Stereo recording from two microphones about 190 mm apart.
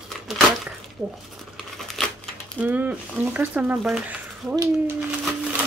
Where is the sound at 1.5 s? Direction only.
Centre (ahead or behind).